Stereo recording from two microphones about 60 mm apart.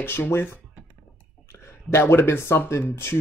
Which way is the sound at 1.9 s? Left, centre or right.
Left.